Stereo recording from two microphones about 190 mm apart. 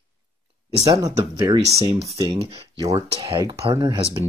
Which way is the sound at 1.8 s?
30° right (ahead or behind).